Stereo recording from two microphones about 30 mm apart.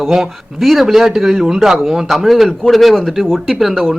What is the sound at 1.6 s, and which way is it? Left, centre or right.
Speech, centre.